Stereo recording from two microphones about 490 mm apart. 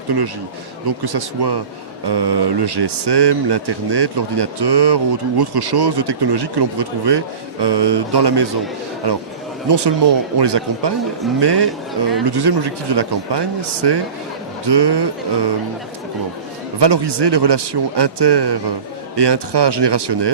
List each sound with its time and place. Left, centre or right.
0.9 s speech: right
16.8 s speech: right